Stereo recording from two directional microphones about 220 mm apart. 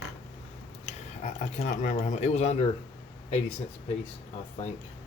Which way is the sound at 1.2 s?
30° left (ahead or behind).